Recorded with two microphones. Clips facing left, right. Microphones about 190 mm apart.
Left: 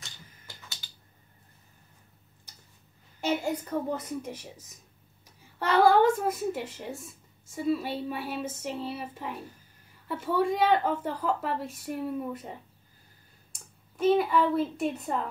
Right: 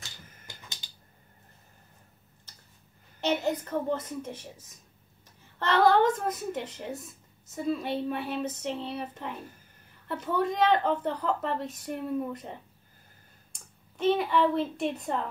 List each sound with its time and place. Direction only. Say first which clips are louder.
0.8 s a sound: even; 20° right (ahead or behind)
3.2 s a woman's voice: right 1 dB; 10° left (ahead or behind)
5.6 s a woman's voice: left 1 dB; 10° left (ahead or behind)
13.9 s a child's voice: left 2 dB; 5° left (ahead or behind)